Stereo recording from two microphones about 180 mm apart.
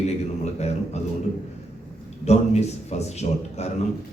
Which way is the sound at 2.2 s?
35° left (ahead or behind).